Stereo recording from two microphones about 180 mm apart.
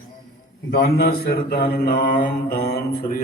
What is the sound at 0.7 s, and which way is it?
A man's voice, 60° left (ahead or behind).